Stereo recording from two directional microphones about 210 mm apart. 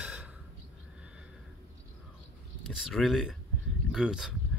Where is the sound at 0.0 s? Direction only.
5° right (ahead or behind).